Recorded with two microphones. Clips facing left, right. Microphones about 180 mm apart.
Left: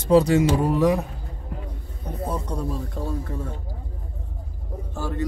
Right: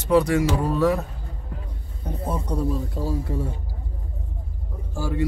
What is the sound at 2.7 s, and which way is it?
Speech, 5° right (ahead or behind).